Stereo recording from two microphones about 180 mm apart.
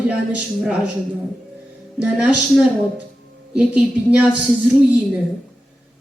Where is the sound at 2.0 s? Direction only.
10° right (ahead or behind).